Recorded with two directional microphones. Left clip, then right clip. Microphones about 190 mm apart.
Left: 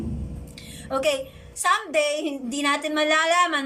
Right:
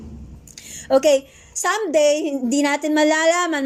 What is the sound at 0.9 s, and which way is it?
A woman's voice, 35° right (ahead or behind).